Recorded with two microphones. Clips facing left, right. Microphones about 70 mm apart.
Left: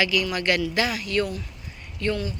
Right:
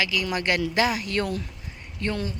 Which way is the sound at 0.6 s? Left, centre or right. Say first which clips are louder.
Right 1 dB; right.